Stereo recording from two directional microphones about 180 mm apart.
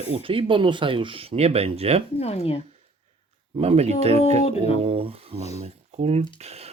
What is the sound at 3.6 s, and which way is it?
Speech, 35° right (ahead or behind).